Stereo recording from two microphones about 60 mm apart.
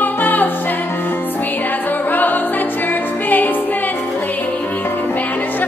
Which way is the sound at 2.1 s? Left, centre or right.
Left.